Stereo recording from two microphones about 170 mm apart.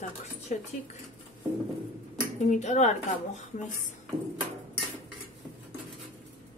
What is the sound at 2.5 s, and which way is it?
Speech, 45° left (ahead or behind).